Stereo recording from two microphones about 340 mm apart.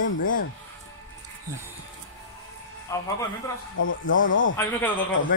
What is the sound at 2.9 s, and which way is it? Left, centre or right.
Speech, centre.